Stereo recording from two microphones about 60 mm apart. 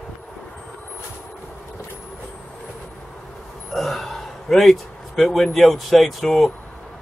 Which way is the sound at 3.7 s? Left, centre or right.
Centre.